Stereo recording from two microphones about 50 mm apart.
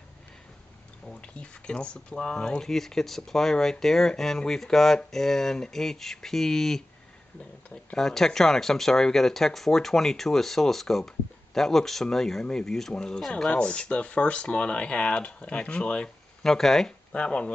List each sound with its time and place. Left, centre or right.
1.2 s speech: left
16.4 s speech: centre
17.1 s speech: left